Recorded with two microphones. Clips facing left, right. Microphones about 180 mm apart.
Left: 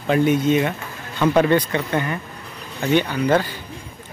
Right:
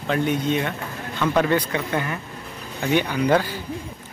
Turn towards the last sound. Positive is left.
turn(degrees=-10)  # may be behind; listen again after turning